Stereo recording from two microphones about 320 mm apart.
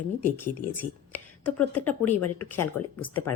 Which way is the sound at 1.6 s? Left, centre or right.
Left.